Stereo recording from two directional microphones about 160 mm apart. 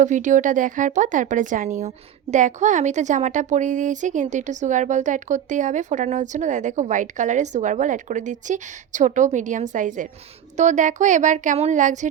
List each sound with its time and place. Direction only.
0.0 s speech: 50° right (ahead or behind)